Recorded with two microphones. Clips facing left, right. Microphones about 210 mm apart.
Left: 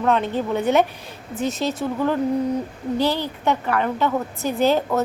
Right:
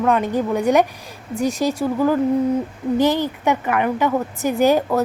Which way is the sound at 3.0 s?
15° right (ahead or behind).